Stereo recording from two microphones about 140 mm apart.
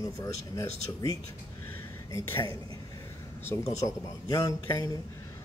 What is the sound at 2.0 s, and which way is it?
Speech, 20° left (ahead or behind).